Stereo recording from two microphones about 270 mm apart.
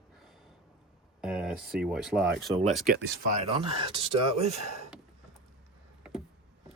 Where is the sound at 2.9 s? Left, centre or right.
Right.